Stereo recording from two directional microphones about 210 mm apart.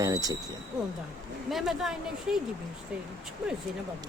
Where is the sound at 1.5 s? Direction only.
Centre (ahead or behind).